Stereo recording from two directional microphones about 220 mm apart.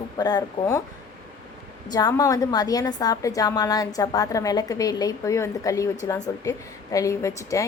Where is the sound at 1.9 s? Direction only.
15° left (ahead or behind).